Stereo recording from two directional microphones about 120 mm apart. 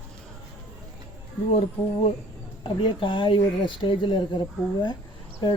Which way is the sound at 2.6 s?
45° left (ahead or behind).